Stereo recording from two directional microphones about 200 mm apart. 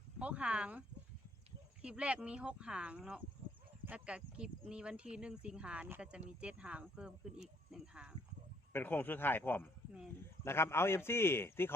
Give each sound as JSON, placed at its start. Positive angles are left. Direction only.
{"t": 0.2, "sound": "speech", "side_deg": -5}
{"t": 8.7, "sound": "a man's voice", "side_deg": 10}